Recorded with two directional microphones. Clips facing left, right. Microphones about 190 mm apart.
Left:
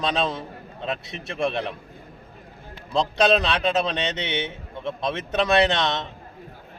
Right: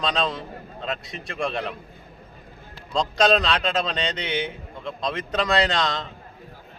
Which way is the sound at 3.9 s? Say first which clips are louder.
Left 1 dB; 25° left (ahead or behind).